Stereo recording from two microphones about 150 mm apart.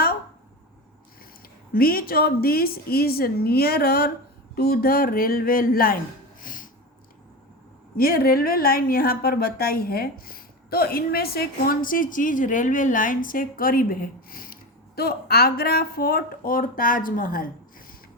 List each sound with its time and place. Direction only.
1.7 s a woman's voice: 80° left
6.4 s a sound: 65° left (ahead or behind)
7.9 s a woman's voice: 85° left; by 17.8 s 70° left (ahead or behind)